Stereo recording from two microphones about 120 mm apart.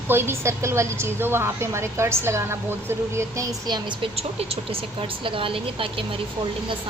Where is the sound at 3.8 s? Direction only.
50° right (ahead or behind).